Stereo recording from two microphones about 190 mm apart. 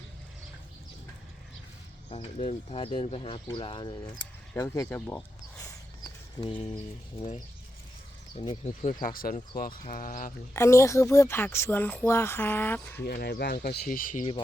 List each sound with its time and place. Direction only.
2.4 s speech: 35° left (ahead or behind)
4.5 s speech: 15° left (ahead or behind)
6.4 s a sound: 30° left (ahead or behind)
8.4 s speech: 35° left (ahead or behind)
10.5 s speech: 15° left (ahead or behind)
13.1 s speech: 55° left (ahead or behind)